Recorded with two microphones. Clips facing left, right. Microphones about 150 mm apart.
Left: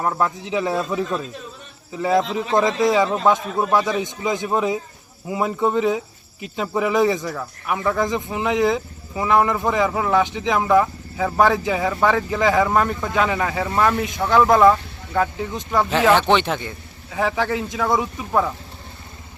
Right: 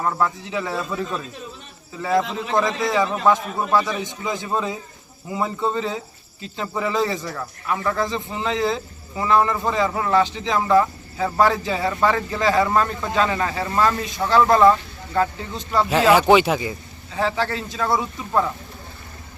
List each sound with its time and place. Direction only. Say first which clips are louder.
0.0 s a man's voice: left 1 dB; 15° left (ahead or behind)
15.9 s speech: right 2 dB; 10° right (ahead or behind)
17.2 s speech: left 2 dB; 15° left (ahead or behind)